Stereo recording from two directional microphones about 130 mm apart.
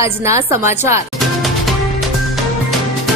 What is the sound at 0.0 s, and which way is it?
Speech, 20° right (ahead or behind).